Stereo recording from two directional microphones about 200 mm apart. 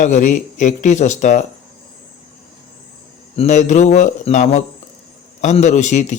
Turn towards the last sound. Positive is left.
turn(degrees=35)  # may be behind; listen again after turning